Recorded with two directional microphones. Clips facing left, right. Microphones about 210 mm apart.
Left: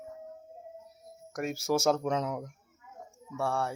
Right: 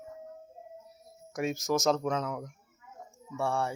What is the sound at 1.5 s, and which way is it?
Speech, 10° left (ahead or behind).